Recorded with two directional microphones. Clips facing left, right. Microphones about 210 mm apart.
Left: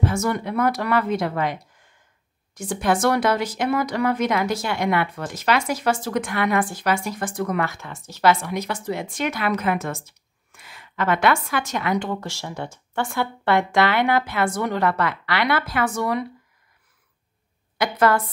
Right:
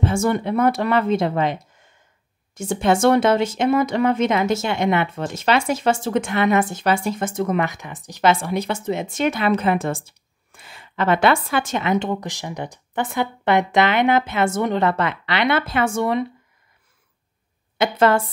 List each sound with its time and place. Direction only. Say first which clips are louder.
0.0 s speech: right 3 dB; 25° right (ahead or behind)
17.7 s speech: right 3 dB; 25° right (ahead or behind)